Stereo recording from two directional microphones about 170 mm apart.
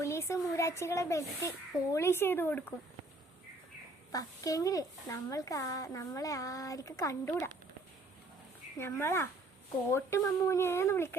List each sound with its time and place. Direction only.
0.0 s speech: 15° left (ahead or behind)
4.1 s speech: 20° left (ahead or behind)
8.8 s speech: 15° left (ahead or behind)